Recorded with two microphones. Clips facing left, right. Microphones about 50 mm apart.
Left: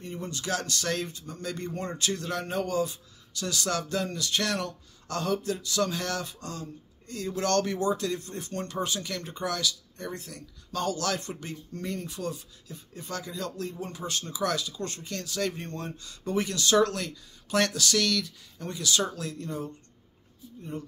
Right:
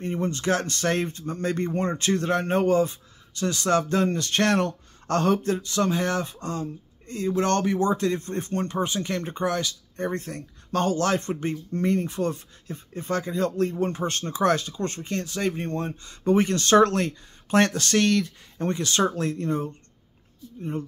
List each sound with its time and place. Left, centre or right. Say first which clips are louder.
0.0 s speech: right 9 dB; right